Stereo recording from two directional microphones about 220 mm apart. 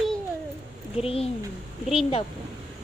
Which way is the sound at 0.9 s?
25° left (ahead or behind).